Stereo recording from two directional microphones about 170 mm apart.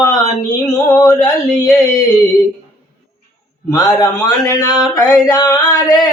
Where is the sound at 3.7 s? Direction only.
20° left (ahead or behind).